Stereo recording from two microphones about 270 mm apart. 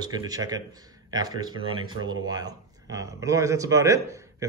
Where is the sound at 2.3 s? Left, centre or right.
Centre.